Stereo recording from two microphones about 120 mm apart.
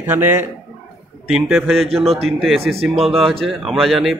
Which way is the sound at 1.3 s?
Centre (ahead or behind).